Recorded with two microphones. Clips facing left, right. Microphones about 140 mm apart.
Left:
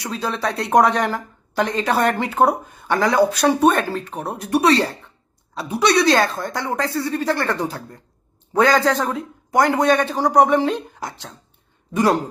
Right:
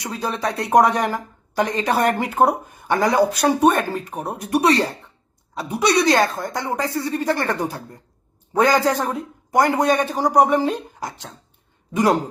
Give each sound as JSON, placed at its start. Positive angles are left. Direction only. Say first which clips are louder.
{"t": 0.0, "sound": "speech", "louder": "left 1 dB", "side_deg": -15}